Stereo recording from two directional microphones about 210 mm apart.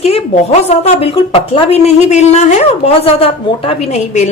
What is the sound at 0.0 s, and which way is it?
A woman's voice, 30° left (ahead or behind).